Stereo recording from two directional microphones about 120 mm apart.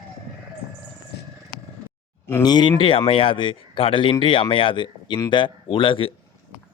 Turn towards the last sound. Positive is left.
turn(degrees=45)  # may be behind; listen again after turning